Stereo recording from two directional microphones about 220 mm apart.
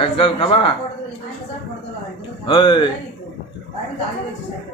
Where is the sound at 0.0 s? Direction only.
25° left (ahead or behind).